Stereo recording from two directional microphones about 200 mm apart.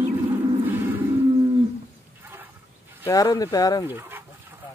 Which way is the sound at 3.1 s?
15° left (ahead or behind).